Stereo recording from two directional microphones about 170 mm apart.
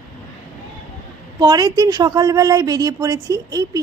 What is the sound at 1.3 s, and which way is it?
A woman's voice, 25° right (ahead or behind).